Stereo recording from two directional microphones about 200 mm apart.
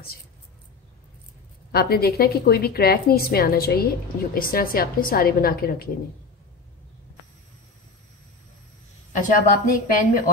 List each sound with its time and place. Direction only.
1.7 s a woman's voice: 50° left (ahead or behind)
9.1 s a woman's voice: 40° left (ahead or behind)